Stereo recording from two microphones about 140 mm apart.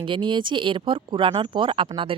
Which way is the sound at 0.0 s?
35° right (ahead or behind).